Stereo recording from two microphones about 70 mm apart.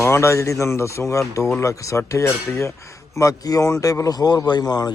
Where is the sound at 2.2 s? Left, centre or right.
Left.